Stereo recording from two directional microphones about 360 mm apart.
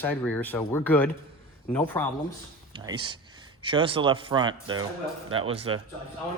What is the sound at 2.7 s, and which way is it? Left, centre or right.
Speech, centre.